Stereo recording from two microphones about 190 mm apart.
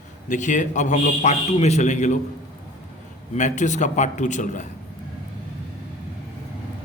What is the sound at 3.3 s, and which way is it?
Speech, 40° left (ahead or behind).